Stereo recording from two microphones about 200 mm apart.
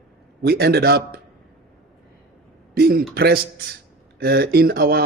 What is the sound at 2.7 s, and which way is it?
Speech, 50° right (ahead or behind).